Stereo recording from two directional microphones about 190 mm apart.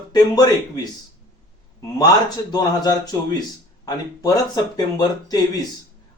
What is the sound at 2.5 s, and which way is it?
Speech, 20° left (ahead or behind).